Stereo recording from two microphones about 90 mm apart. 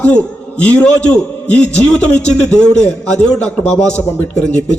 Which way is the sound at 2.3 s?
10° left (ahead or behind).